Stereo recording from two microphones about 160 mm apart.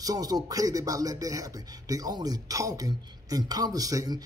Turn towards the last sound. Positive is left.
turn(degrees=-25)  # may be behind; listen again after turning